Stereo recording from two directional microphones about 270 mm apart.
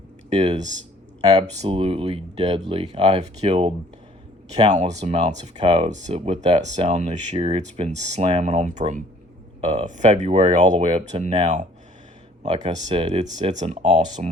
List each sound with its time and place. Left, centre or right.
0.3 s speech: right
1.2 s speech: centre
4.7 s speech: right